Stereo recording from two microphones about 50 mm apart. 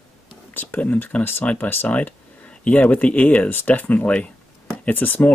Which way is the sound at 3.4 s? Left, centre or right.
Left.